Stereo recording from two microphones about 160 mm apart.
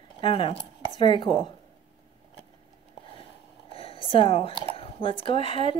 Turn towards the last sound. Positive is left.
turn(degrees=35)  # may be behind; listen again after turning